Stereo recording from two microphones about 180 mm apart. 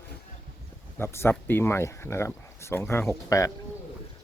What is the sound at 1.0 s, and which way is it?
Speech, 15° left (ahead or behind).